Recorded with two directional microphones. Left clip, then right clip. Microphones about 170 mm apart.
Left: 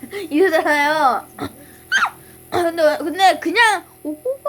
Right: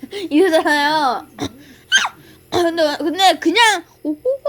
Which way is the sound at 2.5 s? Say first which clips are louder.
Even; 25° right (ahead or behind).